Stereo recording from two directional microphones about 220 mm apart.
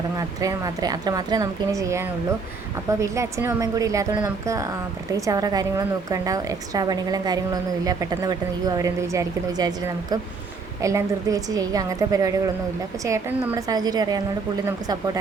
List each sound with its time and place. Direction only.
0.2 s a woman's voice: 15° right (ahead or behind)